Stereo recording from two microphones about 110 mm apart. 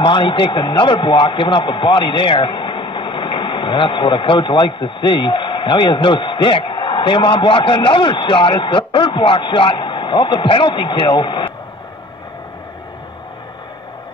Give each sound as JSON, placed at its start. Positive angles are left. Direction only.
{"t": 0.0, "sound": "a man's voice", "side_deg": 50}